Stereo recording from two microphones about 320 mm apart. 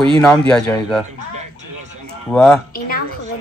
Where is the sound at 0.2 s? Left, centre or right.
Centre.